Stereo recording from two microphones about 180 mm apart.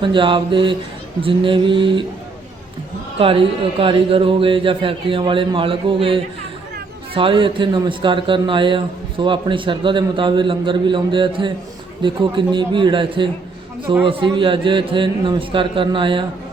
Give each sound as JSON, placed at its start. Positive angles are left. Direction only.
{"t": 0.0, "sound": "a man's voice", "side_deg": -25}
{"t": 3.2, "sound": "a man's voice", "side_deg": -30}